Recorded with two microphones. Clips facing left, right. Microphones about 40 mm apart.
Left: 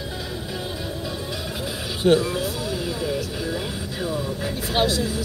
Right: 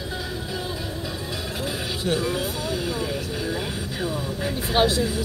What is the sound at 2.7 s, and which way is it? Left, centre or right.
Vehicle, centre.